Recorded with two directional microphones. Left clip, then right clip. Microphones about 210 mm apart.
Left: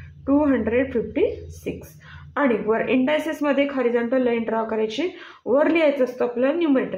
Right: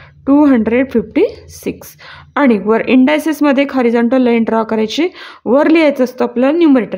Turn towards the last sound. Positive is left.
turn(degrees=-55)  # may be behind; listen again after turning